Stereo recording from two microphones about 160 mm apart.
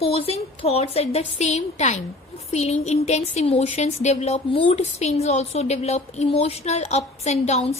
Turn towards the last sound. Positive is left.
turn(degrees=40)  # may be behind; listen again after turning